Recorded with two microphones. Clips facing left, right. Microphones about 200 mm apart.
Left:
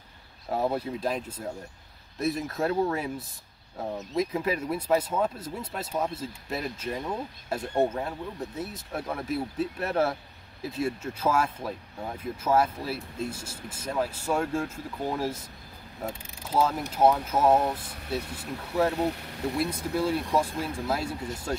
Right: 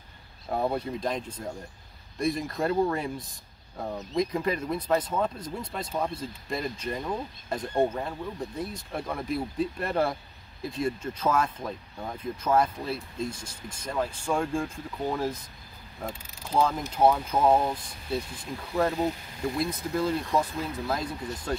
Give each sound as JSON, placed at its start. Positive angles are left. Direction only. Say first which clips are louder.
{"t": 0.5, "sound": "speech", "louder": "even", "side_deg": 5}
{"t": 18.9, "sound": "speech", "louder": "even", "side_deg": 70}
{"t": 20.0, "sound": "speech", "louder": "left 1 dB", "side_deg": 10}